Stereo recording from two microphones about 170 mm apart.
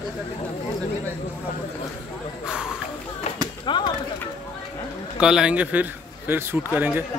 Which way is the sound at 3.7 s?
30° left (ahead or behind).